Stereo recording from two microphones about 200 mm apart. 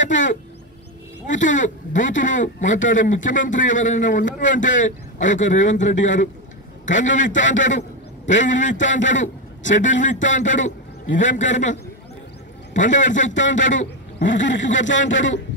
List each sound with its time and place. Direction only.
0.0 s speech: 40° left (ahead or behind)
14.8 s speech: 65° left (ahead or behind)